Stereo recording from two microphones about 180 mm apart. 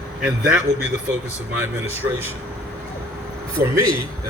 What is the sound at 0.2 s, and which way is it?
Speech, 5° right (ahead or behind).